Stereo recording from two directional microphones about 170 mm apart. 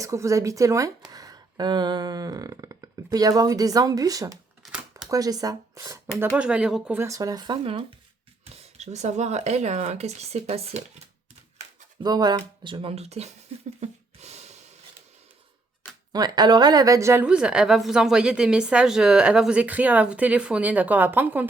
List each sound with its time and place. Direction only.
0.0 s speech: 15° right (ahead or behind)
6.3 s speech: 5° right (ahead or behind)
6.9 s speech: 15° right (ahead or behind); by 10.8 s 35° right (ahead or behind)
11.9 s speech: 25° right (ahead or behind)
13.8 s a sound: 40° right (ahead or behind)
16.1 s a woman's voice: 25° right (ahead or behind)